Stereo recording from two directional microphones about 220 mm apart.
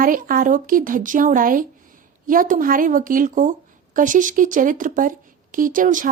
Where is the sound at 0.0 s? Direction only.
40° right (ahead or behind).